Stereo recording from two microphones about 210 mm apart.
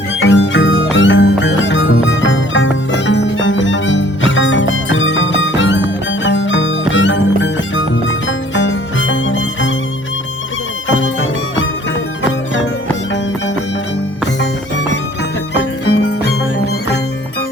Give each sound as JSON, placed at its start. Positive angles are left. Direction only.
{"t": 0.2, "sound": "music", "side_deg": 65}
{"t": 10.8, "sound": "music", "side_deg": 65}